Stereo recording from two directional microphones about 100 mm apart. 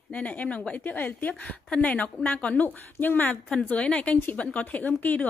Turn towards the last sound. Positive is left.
turn(degrees=15)  # may be behind; listen again after turning